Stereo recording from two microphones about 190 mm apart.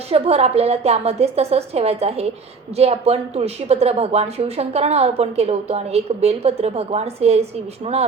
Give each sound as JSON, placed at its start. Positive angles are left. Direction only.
{"t": 0.1, "sound": "speech", "side_deg": -35}